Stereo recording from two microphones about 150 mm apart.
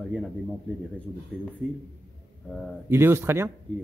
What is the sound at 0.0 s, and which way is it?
A man's voice, 5° left (ahead or behind).